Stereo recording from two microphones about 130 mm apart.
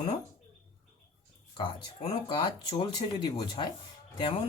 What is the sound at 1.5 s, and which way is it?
Speech, 40° left (ahead or behind).